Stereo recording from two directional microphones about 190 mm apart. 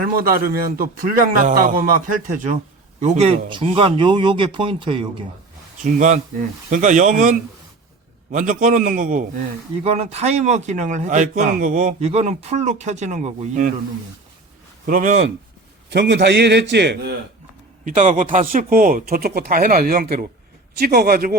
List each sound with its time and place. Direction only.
0.0 s a man's voice: 50° right (ahead or behind); by 5.0 s 25° right (ahead or behind)
5.8 s a man's voice: 40° right (ahead or behind)
14.8 s a man's voice: 45° right (ahead or behind)
15.9 s a man's voice: 65° right (ahead or behind)
17.8 s a man's voice: 40° right (ahead or behind)